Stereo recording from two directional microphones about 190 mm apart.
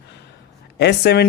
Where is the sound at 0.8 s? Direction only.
60° left (ahead or behind).